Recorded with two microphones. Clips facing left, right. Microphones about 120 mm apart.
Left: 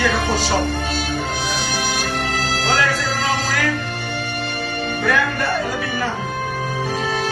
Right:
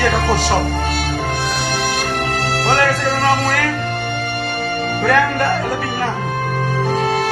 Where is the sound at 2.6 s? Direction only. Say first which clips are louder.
Right 5 dB; 55° right (ahead or behind).